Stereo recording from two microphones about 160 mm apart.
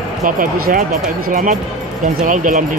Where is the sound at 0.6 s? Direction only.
65° right (ahead or behind).